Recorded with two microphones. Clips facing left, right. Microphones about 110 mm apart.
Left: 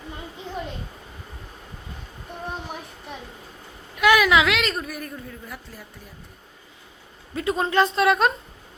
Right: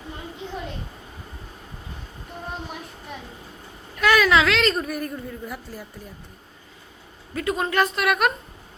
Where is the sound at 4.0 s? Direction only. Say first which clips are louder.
Left 1 dB; 15° left (ahead or behind).